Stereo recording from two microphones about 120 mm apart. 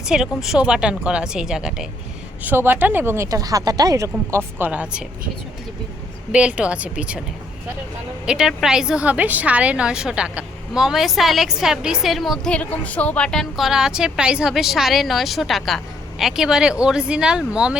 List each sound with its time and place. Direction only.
0.0 s a woman's voice: 5° right (ahead or behind)
2.4 s speech: 15° right (ahead or behind)
6.3 s a woman's voice: 10° right (ahead or behind)
8.3 s a woman's voice: 5° right (ahead or behind)